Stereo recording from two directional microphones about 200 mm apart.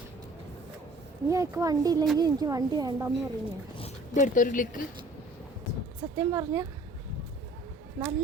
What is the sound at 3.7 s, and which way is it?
Zipper, 35° left (ahead or behind).